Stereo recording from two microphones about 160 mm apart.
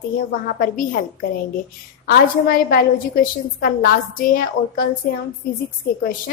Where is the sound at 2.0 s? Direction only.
65° left (ahead or behind).